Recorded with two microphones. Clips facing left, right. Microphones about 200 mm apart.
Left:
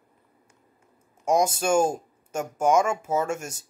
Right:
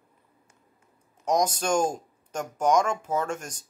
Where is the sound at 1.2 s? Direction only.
10° left (ahead or behind).